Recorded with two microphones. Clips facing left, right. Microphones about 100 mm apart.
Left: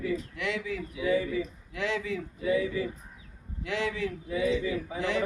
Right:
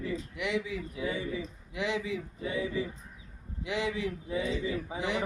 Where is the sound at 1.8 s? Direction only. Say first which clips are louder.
Left 1 dB; 15° right (ahead or behind).